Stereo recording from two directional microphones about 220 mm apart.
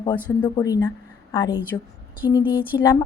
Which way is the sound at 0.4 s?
20° left (ahead or behind).